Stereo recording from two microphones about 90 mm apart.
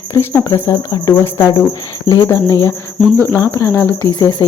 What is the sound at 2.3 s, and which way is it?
Speech, 30° left (ahead or behind).